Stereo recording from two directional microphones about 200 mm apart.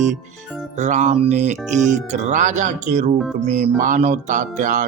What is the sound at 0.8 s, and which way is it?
Speech, 35° right (ahead or behind).